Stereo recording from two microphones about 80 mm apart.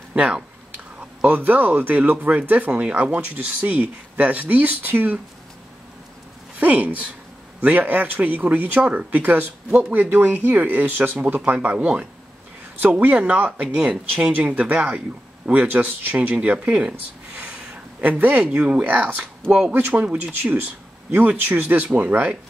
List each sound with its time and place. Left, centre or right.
0.1 s speech: centre
6.6 s speech: centre
18.2 s speech: centre